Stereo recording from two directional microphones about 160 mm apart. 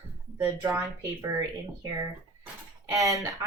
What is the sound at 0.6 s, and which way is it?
Speech, 15° right (ahead or behind).